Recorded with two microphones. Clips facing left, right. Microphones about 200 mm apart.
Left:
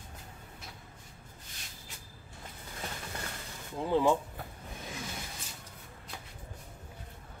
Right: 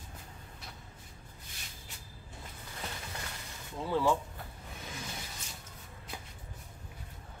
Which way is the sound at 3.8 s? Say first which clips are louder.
Left 3 dB; 20° left (ahead or behind).